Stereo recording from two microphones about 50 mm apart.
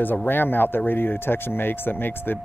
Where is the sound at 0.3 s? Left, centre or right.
Left.